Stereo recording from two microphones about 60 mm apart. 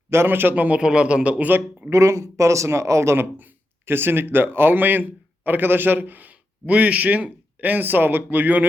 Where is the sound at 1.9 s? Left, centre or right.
Right.